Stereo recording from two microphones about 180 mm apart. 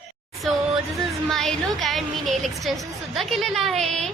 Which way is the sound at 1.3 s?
Centre (ahead or behind).